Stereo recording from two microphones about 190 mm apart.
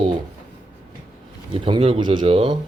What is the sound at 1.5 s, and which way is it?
Speech, 30° right (ahead or behind).